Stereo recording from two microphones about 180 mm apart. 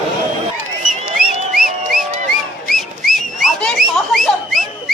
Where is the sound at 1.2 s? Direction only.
50° right (ahead or behind).